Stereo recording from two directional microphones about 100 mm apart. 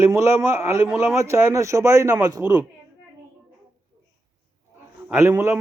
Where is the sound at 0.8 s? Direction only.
5° right (ahead or behind).